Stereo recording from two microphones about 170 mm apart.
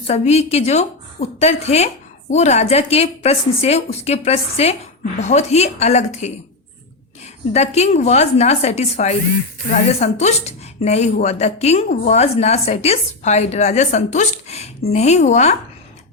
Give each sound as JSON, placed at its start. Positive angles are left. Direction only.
{"t": 0.1, "sound": "speech", "side_deg": 40}
{"t": 7.5, "sound": "speech", "side_deg": 40}